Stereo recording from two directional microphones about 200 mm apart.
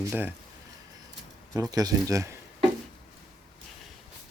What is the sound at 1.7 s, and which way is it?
Speech, 15° right (ahead or behind).